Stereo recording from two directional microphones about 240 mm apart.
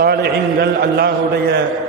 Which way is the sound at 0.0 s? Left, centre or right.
Right.